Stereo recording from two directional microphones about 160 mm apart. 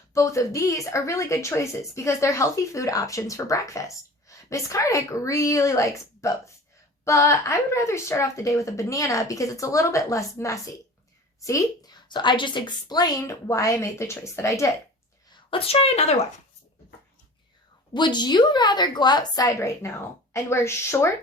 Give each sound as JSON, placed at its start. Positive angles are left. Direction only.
{"t": 0.1, "sound": "a woman's voice", "side_deg": 20}
{"t": 15.3, "sound": "a woman's voice", "side_deg": 35}
{"t": 17.9, "sound": "a woman's voice", "side_deg": 30}